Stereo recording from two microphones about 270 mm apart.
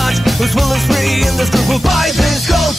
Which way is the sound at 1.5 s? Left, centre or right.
Centre.